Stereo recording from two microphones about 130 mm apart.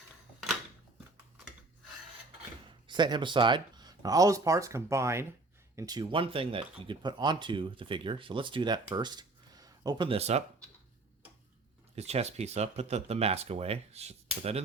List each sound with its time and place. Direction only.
2.8 s speech: 35° right (ahead or behind)
10.1 s speech: 55° right (ahead or behind)
11.9 s speech: 55° right (ahead or behind)